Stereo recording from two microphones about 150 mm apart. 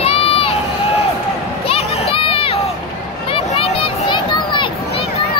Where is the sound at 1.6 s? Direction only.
40° left (ahead or behind).